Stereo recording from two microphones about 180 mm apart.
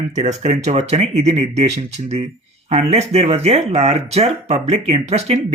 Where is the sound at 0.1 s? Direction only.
40° right (ahead or behind).